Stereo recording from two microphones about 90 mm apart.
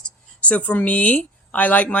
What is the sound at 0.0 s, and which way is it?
Speech, 15° left (ahead or behind).